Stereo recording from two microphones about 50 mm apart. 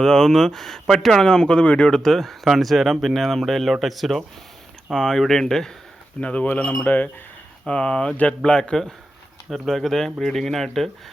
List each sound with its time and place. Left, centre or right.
0.0 s speech: centre
2.0 s speech: centre
6.1 s speech: left
7.7 s speech: left
9.5 s speech: centre